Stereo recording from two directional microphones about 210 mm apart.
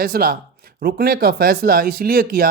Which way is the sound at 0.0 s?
45° right (ahead or behind).